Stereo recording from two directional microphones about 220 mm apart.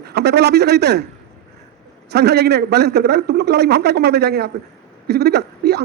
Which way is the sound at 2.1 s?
50° right (ahead or behind).